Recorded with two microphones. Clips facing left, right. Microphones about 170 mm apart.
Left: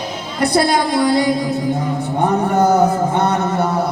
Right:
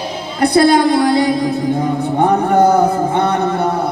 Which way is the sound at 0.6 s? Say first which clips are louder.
Right 6 dB; 55° right (ahead or behind).